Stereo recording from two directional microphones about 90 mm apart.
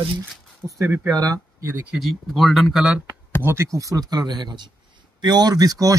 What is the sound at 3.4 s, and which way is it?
Speech, 30° right (ahead or behind).